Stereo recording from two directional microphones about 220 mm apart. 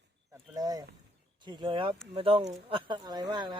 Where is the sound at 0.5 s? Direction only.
15° right (ahead or behind).